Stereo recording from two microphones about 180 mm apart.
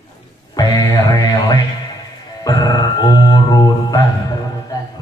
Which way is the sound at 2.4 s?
20° left (ahead or behind).